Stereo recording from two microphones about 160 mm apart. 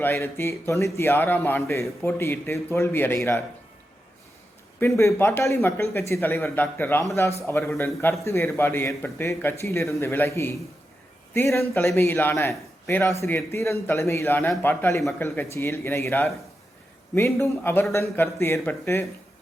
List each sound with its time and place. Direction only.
0.0 s a man's voice: 15° left (ahead or behind)
4.8 s a man's voice: 20° left (ahead or behind)